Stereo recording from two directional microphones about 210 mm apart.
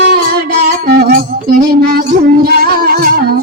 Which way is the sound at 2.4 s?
45° right (ahead or behind).